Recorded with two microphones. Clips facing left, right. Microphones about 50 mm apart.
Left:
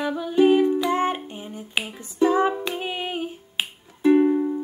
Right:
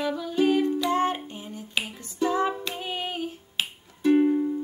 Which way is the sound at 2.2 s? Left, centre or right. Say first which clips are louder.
Left 5 dB; left.